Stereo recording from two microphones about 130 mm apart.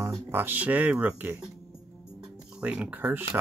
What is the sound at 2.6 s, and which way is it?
Speech, 10° right (ahead or behind).